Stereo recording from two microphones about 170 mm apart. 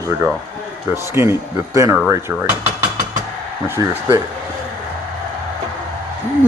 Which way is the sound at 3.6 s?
15° right (ahead or behind).